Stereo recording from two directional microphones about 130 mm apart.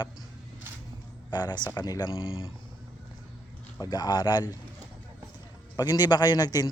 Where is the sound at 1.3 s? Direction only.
30° left (ahead or behind).